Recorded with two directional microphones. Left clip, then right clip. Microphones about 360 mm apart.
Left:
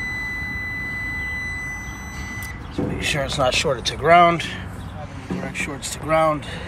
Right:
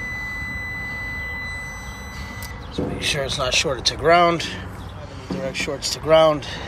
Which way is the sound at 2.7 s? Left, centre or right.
Centre.